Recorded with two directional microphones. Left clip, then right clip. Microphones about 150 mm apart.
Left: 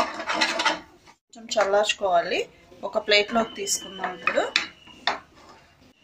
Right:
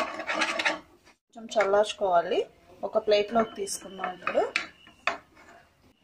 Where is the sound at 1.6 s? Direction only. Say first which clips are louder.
Left 2 dB; 35° right (ahead or behind).